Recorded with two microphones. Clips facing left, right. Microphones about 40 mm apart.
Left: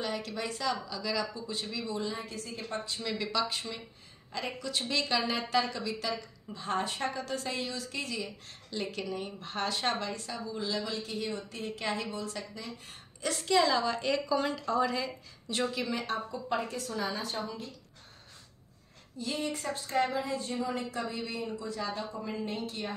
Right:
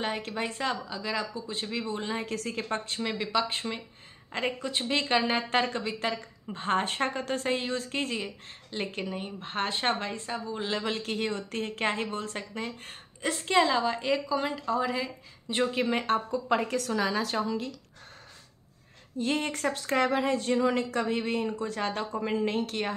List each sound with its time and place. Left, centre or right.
0.0 s speech: right
2.3 s speech: right
3.0 s a woman's voice: right
13.5 s a woman's voice: right; by 15.5 s centre
15.5 s speech: right
16.3 s speech: right
19.1 s speech: right